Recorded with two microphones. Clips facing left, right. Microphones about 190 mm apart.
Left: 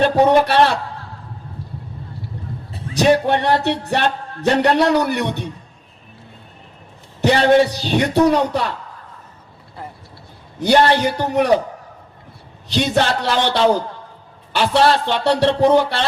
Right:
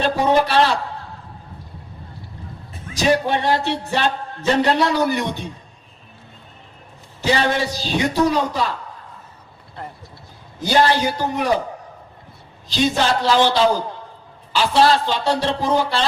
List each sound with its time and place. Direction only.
0.0 s a man's voice: 60° left (ahead or behind)
2.9 s a man's voice: 65° left (ahead or behind)
7.2 s a man's voice: 60° left (ahead or behind)
10.6 s a man's voice: 60° left (ahead or behind)
12.6 s a man's voice: 65° left (ahead or behind)